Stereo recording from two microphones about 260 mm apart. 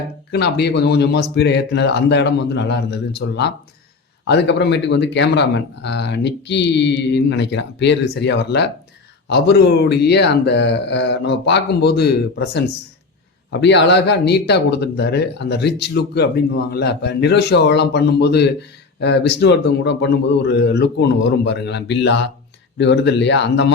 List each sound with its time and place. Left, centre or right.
0.3 s speech: left